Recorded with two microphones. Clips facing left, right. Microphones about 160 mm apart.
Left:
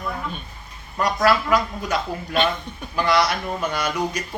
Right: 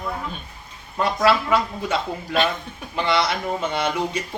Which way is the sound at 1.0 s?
25° right (ahead or behind).